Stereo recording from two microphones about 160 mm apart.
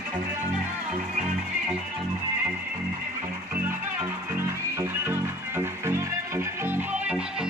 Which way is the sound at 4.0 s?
15° right (ahead or behind).